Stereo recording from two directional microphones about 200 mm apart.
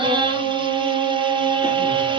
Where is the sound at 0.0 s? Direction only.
25° right (ahead or behind).